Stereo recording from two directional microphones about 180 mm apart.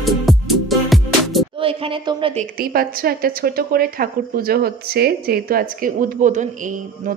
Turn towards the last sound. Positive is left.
turn(degrees=-45)  # may be behind; listen again after turning